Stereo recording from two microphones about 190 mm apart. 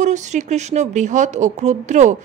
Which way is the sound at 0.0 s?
40° right (ahead or behind).